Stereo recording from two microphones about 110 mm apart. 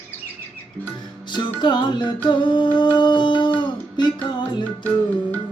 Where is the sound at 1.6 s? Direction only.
45° left (ahead or behind).